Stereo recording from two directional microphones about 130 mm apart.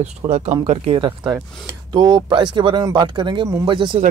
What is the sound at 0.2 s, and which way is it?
Speech, 40° right (ahead or behind).